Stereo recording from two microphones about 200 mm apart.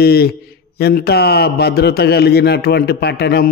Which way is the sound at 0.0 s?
50° left (ahead or behind).